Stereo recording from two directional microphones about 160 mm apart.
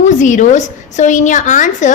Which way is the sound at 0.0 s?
50° left (ahead or behind).